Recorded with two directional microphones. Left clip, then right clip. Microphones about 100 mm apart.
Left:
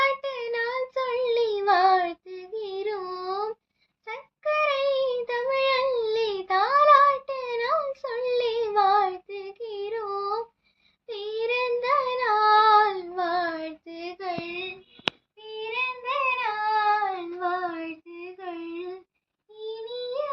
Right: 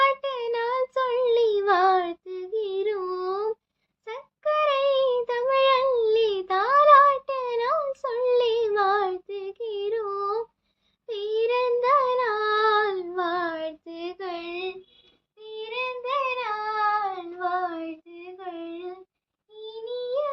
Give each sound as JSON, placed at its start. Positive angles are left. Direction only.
{"t": 0.0, "sound": "child singing", "side_deg": -40}